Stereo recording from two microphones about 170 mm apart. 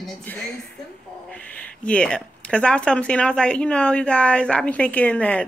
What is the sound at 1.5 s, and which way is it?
Speech, 5° left (ahead or behind).